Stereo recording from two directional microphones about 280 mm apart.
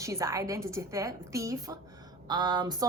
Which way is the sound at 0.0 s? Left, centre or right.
Centre.